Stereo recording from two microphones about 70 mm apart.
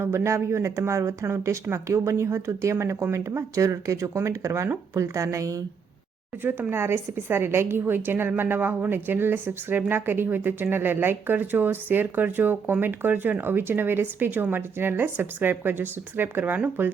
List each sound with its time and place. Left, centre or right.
0.0 s speech: right
6.4 s a woman's voice: right